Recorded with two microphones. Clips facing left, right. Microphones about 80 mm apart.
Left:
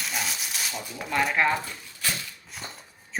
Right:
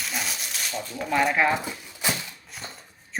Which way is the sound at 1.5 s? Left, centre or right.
Centre.